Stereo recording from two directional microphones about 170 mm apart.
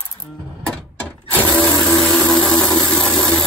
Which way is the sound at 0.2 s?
5° left (ahead or behind).